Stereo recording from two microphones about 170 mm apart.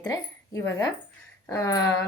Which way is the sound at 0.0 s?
20° left (ahead or behind).